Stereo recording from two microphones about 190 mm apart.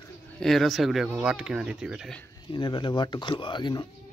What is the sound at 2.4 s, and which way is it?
Speech, 25° left (ahead or behind).